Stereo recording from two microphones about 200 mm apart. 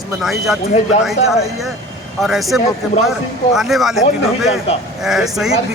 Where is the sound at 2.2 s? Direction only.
Centre (ahead or behind).